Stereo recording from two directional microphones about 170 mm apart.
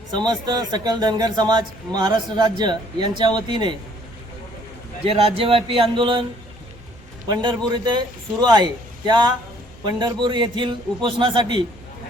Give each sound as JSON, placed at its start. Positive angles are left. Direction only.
{"t": 0.3, "sound": "a man's voice", "side_deg": -25}
{"t": 5.0, "sound": "speech", "side_deg": -35}
{"t": 7.3, "sound": "a man's voice", "side_deg": -25}